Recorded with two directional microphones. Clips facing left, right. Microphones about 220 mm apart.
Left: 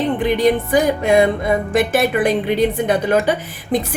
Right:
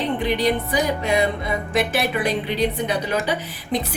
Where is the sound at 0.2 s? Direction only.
50° left (ahead or behind).